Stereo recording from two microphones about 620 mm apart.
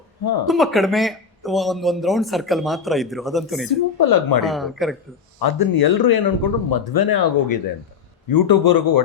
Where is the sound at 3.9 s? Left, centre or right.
Left.